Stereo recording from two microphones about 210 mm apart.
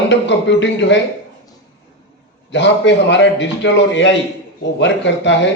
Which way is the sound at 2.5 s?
60° left (ahead or behind).